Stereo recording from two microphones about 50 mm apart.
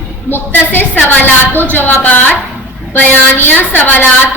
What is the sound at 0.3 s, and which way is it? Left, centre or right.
A woman's voice, left.